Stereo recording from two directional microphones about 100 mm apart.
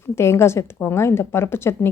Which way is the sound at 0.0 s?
25° left (ahead or behind).